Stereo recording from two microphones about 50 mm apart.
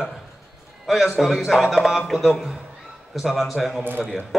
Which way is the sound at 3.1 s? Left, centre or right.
Centre.